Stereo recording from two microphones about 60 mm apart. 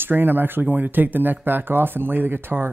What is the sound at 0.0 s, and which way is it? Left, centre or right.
Speech, right.